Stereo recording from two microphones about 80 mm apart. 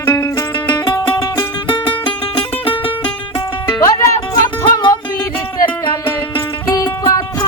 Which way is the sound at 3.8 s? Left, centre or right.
Left.